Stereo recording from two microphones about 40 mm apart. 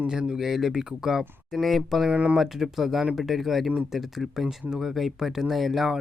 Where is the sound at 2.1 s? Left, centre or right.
Right.